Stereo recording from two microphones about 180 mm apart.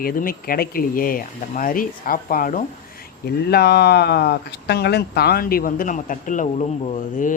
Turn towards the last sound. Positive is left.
turn(degrees=45)  # may be behind; listen again after turning